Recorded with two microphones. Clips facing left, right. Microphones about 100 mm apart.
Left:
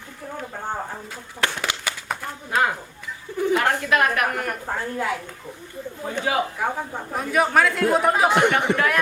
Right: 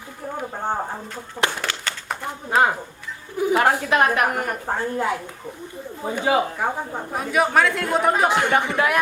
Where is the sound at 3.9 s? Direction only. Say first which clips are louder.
Right 2 dB; 25° right (ahead or behind); by 8.4 s centre (ahead or behind).